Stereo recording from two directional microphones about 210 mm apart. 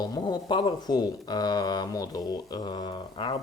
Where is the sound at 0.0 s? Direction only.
20° left (ahead or behind).